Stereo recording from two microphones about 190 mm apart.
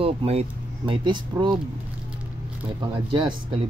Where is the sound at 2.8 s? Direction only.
25° right (ahead or behind).